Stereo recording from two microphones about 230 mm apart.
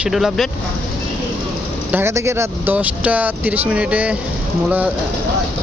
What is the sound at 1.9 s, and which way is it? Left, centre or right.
Speech, centre.